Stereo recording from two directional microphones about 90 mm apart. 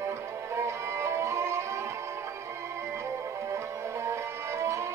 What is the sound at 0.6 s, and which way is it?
Violin, 30° right (ahead or behind).